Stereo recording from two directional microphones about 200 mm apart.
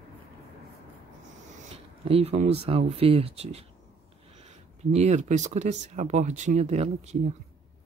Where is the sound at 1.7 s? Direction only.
30° right (ahead or behind).